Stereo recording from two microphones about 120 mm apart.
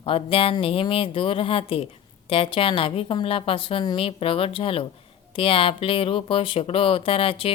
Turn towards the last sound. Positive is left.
turn(degrees=50)  # may be behind; listen again after turning